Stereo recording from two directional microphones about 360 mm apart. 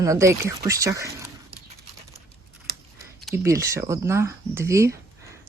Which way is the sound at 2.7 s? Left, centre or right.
Right.